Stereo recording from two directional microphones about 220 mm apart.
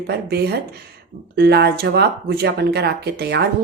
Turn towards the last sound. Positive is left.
turn(degrees=-50)  # may be behind; listen again after turning